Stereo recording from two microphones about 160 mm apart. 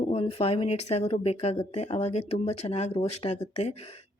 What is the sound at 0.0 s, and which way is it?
Speech, 35° left (ahead or behind).